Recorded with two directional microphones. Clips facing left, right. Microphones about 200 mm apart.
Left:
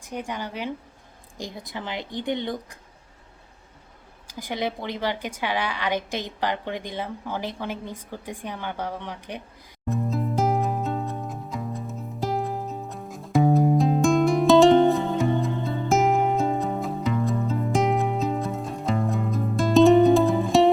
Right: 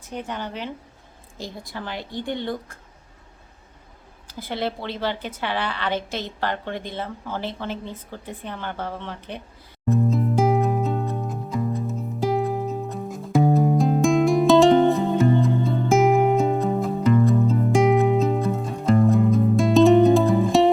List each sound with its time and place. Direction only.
0.0 s a woman's voice: 10° left (ahead or behind)
4.3 s a woman's voice: 15° left (ahead or behind)
9.9 s music: centre (ahead or behind)